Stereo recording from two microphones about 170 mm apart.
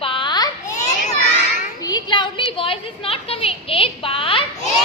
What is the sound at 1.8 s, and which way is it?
A woman's voice, 25° left (ahead or behind).